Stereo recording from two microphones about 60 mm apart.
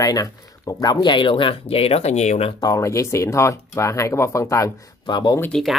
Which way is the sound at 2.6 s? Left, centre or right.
Left.